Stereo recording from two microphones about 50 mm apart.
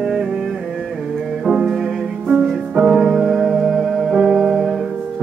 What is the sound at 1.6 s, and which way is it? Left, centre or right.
Music, centre.